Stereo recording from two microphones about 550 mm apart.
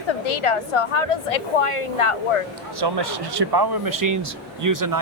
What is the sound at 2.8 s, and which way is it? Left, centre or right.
Speech, right.